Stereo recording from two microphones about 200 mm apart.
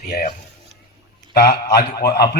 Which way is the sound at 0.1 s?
45° left (ahead or behind).